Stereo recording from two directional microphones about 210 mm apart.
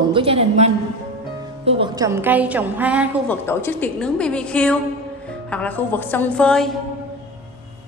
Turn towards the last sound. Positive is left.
turn(degrees=5)  # may be behind; listen again after turning